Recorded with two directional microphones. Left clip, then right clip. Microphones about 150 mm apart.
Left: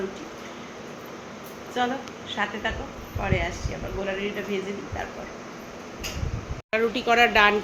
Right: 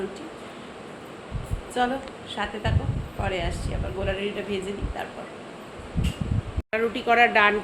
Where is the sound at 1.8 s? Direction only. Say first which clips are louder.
Right 1 dB; 15° right (ahead or behind).